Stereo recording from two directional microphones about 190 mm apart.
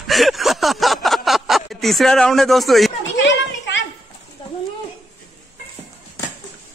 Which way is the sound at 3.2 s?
75° left (ahead or behind).